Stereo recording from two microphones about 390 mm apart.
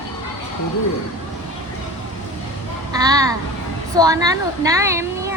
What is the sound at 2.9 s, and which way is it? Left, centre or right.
A woman's voice, centre.